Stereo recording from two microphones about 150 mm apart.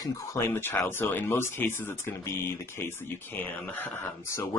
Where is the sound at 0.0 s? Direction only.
20° left (ahead or behind).